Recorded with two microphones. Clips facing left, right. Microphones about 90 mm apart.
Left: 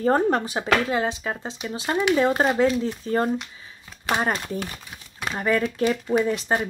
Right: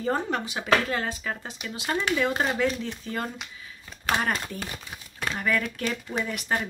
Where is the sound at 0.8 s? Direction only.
20° left (ahead or behind); by 3.3 s 35° left (ahead or behind).